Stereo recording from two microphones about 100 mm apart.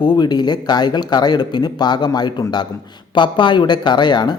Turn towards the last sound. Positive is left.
turn(degrees=45)  # may be behind; listen again after turning